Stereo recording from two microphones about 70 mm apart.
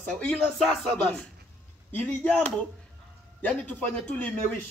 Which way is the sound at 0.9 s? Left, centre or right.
Left.